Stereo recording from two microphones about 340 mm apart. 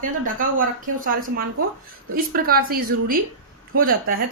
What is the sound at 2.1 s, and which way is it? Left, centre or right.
A woman's voice, right.